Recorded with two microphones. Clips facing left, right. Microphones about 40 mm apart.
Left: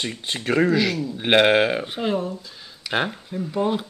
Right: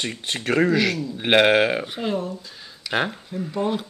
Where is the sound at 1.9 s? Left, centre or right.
Centre.